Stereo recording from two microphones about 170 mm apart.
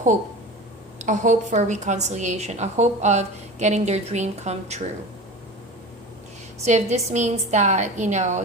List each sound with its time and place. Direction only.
0.9 s a woman's voice: 45° right (ahead or behind)
6.7 s a woman's voice: 45° right (ahead or behind)